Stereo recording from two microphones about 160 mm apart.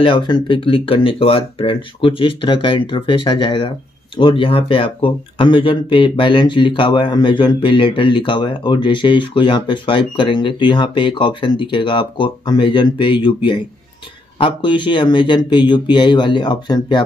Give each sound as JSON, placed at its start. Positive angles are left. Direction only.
{"t": 0.0, "sound": "speech", "side_deg": 30}